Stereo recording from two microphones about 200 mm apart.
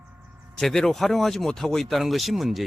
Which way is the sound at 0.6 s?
Centre (ahead or behind).